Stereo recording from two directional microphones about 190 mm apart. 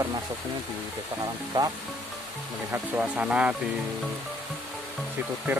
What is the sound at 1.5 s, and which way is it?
Speech, 20° right (ahead or behind).